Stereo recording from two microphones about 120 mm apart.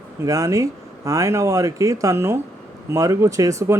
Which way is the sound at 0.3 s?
25° right (ahead or behind).